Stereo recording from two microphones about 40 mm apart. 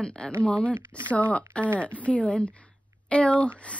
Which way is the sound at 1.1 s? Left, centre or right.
Left.